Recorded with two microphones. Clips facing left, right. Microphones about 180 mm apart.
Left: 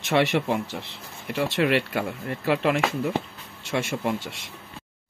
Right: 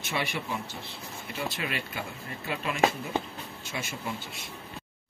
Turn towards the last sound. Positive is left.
turn(degrees=80)